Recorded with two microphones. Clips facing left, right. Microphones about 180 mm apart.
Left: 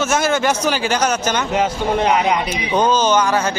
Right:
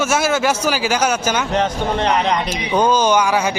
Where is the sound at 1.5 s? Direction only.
10° left (ahead or behind).